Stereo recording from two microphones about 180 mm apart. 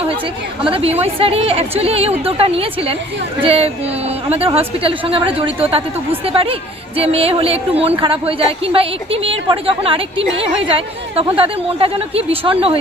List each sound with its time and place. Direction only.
0.6 s a woman's voice: 30° right (ahead or behind)